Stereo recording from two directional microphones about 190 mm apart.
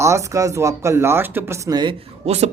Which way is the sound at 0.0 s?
15° right (ahead or behind).